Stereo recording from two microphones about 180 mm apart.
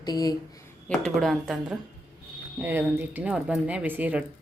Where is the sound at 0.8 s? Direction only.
5° left (ahead or behind).